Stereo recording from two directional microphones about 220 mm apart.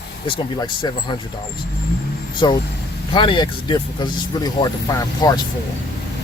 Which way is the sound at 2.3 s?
20° left (ahead or behind).